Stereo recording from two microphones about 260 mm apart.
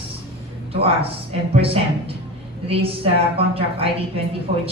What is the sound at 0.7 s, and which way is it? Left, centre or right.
A woman's voice, right.